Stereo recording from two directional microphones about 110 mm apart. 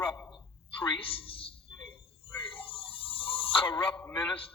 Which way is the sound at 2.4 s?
55° left (ahead or behind).